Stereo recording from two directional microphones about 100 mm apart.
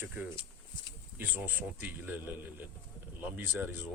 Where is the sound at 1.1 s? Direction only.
20° right (ahead or behind).